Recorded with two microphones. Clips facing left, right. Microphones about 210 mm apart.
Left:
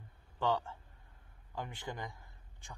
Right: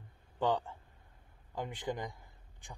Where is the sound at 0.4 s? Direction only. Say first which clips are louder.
Right 2 dB; 15° right (ahead or behind).